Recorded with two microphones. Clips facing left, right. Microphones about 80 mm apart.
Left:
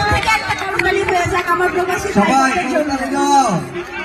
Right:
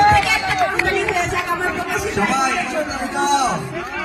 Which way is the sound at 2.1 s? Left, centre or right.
Left.